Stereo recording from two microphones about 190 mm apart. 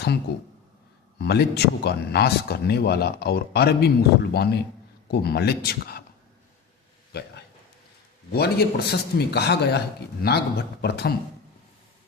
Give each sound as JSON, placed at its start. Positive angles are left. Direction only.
{"t": 1.2, "sound": "speech", "side_deg": 60}
{"t": 7.1, "sound": "a sound", "side_deg": 60}
{"t": 8.3, "sound": "speech", "side_deg": 60}